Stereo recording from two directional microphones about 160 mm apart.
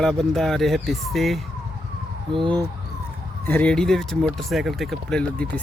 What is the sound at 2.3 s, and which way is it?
Speech, 30° right (ahead or behind).